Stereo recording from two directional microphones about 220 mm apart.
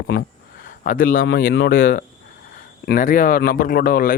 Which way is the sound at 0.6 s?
40° left (ahead or behind).